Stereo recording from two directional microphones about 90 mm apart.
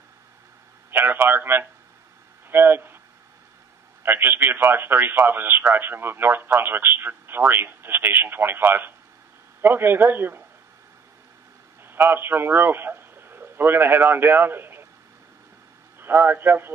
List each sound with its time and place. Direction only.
0.8 s a sound: 25° right (ahead or behind)
4.0 s speech: 25° right (ahead or behind)
11.9 s a man's voice: 25° right (ahead or behind)
16.0 s speech: 20° right (ahead or behind)